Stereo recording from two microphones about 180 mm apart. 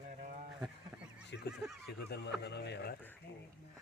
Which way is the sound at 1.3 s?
80° left.